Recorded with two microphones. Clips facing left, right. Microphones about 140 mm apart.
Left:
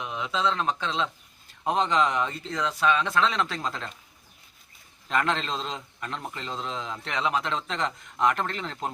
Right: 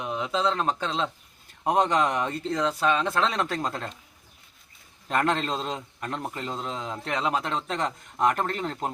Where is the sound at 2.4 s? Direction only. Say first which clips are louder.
Right 2 dB; 35° right (ahead or behind).